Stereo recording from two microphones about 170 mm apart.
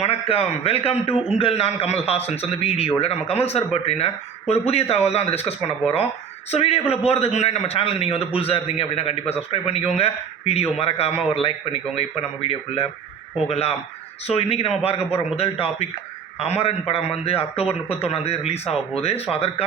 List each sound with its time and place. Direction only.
0.0 s a man's voice: 35° left (ahead or behind)